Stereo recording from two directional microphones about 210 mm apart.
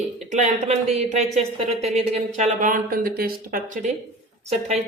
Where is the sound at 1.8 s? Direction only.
30° right (ahead or behind).